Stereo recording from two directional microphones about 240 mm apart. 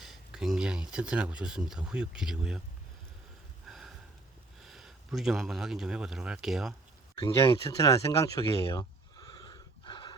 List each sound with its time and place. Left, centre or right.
0.0 s speech: centre
3.7 s sniff: centre
4.6 s speech: centre
7.2 s a sound: centre